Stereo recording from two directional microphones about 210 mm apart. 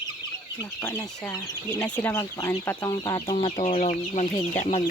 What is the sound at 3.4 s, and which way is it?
Speech, 30° left (ahead or behind).